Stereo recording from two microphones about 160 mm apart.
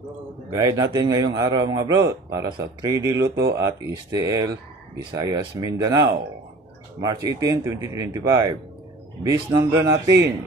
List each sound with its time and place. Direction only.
0.7 s speech: 25° right (ahead or behind)